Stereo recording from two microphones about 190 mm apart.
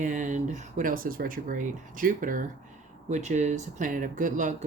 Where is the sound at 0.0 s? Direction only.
40° right (ahead or behind).